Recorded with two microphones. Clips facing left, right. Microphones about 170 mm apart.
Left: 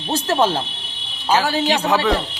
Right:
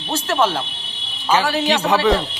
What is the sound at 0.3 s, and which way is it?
Speech, 35° left (ahead or behind).